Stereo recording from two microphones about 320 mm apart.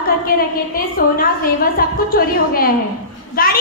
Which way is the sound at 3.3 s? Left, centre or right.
Left.